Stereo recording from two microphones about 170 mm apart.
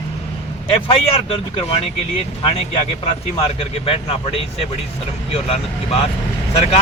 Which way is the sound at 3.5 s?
35° left (ahead or behind).